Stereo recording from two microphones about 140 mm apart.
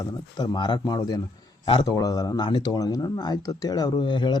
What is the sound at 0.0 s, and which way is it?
Speech, 30° left (ahead or behind).